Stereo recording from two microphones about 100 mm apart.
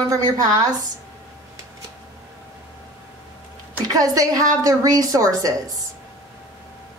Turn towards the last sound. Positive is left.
turn(degrees=-35)  # may be behind; listen again after turning